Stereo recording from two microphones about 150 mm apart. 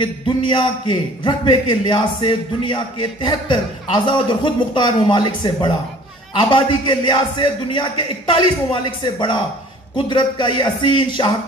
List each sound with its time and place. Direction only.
0.0 s a man's voice: 30° left (ahead or behind)